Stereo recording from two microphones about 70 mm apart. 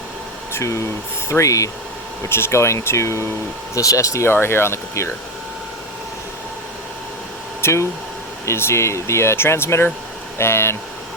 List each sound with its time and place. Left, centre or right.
0.5 s speech: left
2.3 s speech: left
4.3 s speech: left
7.6 s speech: left